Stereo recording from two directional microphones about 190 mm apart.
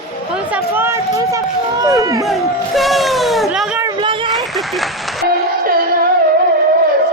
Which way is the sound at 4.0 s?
25° right (ahead or behind).